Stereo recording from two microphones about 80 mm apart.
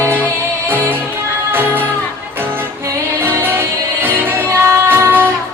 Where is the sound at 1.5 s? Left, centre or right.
Right.